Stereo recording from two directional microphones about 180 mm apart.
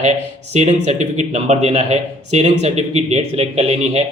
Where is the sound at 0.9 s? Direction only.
40° right (ahead or behind).